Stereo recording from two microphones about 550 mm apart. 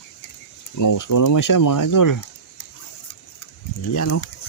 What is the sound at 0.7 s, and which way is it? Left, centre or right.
Speech, left.